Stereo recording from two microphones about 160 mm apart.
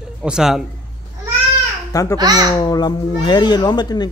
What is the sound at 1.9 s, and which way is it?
Speech, 20° left (ahead or behind).